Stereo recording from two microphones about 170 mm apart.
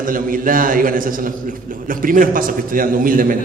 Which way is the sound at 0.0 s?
55° right (ahead or behind).